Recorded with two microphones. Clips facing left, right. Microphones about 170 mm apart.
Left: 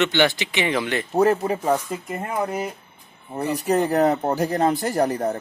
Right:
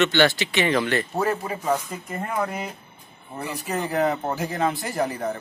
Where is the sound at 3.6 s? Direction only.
40° left (ahead or behind).